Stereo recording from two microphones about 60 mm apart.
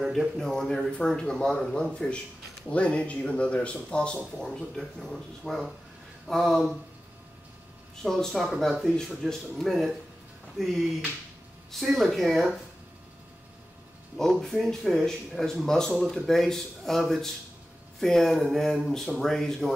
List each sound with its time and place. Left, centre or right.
0.0 s a sound: centre
0.4 s speech: centre
8.0 s speech: centre
14.4 s speech: centre